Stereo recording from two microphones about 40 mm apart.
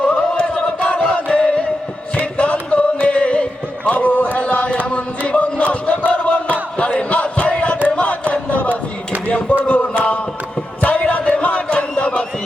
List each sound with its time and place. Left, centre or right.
0.0 s chant: left
2.1 s music: left
3.9 s a sound: left
6.1 s battle cry: left
7.9 s chant: left
9.2 s a sound: left
10.8 s crowd: left